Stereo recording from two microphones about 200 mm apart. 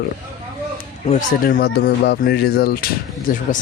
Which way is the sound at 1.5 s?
55° left (ahead or behind).